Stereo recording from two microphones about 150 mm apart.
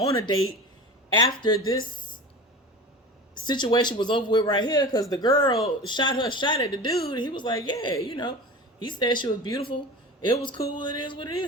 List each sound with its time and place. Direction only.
0.1 s speech: 20° left (ahead or behind)
3.3 s speech: 30° left (ahead or behind)